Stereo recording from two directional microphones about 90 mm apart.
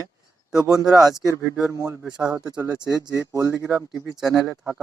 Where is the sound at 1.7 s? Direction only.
35° right (ahead or behind).